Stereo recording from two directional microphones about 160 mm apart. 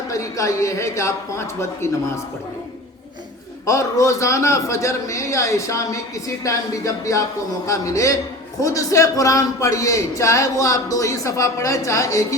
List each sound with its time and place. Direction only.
0.1 s a man's voice: 20° left (ahead or behind)
3.7 s a man's voice: 20° left (ahead or behind)